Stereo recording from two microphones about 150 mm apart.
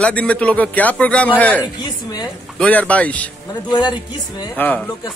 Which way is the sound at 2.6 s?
10° left (ahead or behind).